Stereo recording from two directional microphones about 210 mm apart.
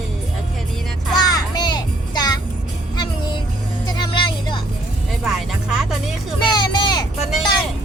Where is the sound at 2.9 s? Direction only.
20° left (ahead or behind).